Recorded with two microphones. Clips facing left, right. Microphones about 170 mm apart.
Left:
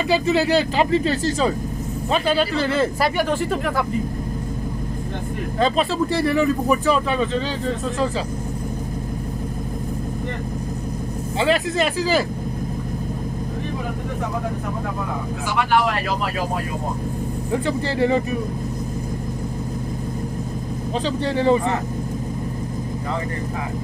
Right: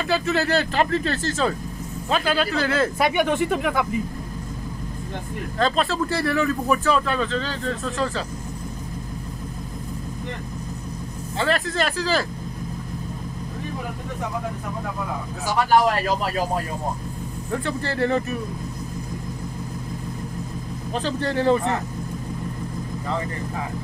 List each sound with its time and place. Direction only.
0.1 s speech: 5° left (ahead or behind)
5.6 s speech: 5° left (ahead or behind)
11.3 s speech: 5° left (ahead or behind)
15.4 s speech: 40° right (ahead or behind)
17.5 s speech: 10° left (ahead or behind)
21.4 s speech: 5° left (ahead or behind)